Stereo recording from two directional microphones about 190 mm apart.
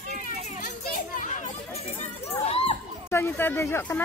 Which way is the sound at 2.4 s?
30° left (ahead or behind).